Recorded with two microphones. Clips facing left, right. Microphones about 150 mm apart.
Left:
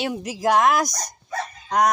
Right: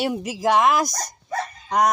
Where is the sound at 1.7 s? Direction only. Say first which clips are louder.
Even; 5° right (ahead or behind).